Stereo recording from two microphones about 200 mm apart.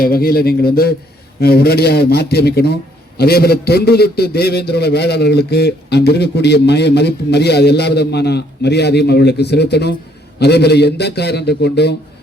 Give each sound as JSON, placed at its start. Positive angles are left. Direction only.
{"t": 0.0, "sound": "a man's voice", "side_deg": 50}